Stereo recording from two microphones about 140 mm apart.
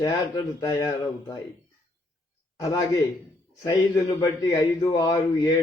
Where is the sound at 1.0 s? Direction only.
30° left (ahead or behind).